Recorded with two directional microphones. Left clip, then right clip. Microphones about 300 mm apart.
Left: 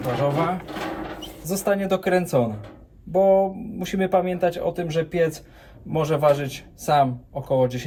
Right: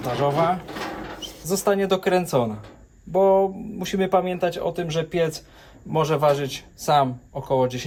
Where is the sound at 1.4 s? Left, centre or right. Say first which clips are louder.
Right 2 dB; centre.